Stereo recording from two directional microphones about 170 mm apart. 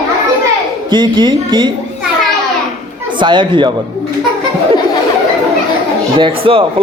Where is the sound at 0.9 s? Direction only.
25° right (ahead or behind).